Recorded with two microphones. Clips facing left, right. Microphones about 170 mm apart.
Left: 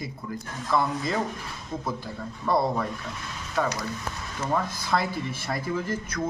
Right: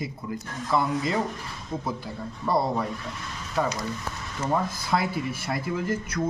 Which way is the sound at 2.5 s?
5° right (ahead or behind).